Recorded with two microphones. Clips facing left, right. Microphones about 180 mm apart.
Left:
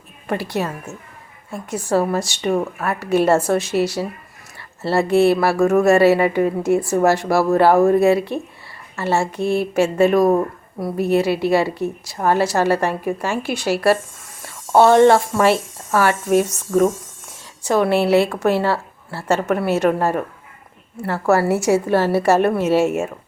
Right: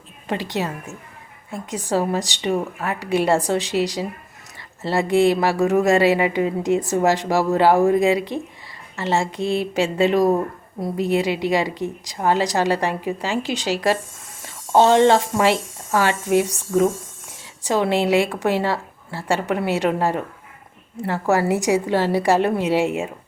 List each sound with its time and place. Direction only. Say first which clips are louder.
0.3 s a woman's voice: left 2 dB; 15° right (ahead or behind)
1.7 s a woman's voice: left 3 dB; 15° right (ahead or behind)
17.6 s a woman's voice: left 3 dB; 15° right (ahead or behind)